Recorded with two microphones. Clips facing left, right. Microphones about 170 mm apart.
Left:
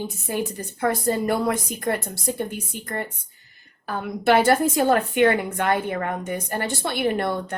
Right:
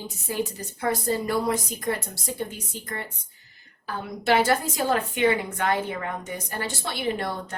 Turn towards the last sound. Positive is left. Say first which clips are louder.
# left 5 dB
turn(degrees=60)  # may be behind; listen again after turning